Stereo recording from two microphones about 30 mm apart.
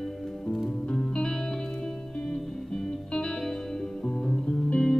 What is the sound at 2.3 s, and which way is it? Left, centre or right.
Music, centre.